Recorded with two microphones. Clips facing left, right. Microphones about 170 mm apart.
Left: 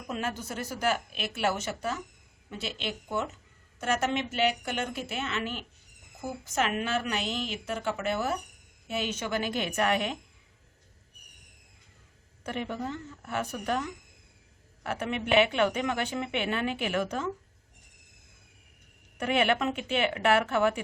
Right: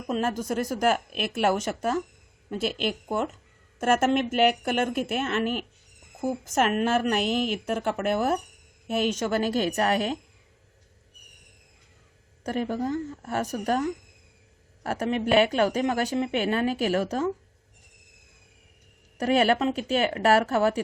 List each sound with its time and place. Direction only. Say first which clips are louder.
0.1 s a woman's voice: right 7 dB; 45° right (ahead or behind)
12.4 s a woman's voice: right 6 dB; 40° right (ahead or behind)
19.1 s a woman's voice: right 5 dB; 40° right (ahead or behind)